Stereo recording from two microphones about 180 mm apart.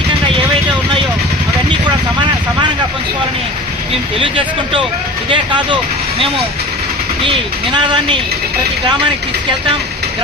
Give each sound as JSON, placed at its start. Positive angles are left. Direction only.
{"t": 1.8, "sound": "vehicle", "side_deg": -25}
{"t": 4.2, "sound": "speech", "side_deg": -25}
{"t": 7.3, "sound": "speech", "side_deg": -25}